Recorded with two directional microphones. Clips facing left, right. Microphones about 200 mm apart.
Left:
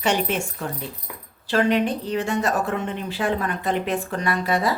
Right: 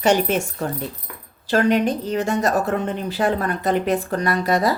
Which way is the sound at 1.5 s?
45° right (ahead or behind).